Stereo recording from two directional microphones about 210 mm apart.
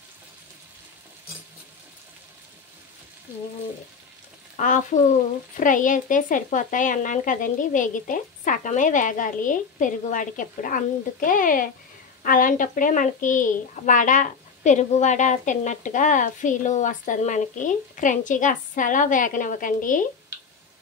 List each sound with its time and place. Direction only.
4.6 s a woman's voice: 35° left (ahead or behind)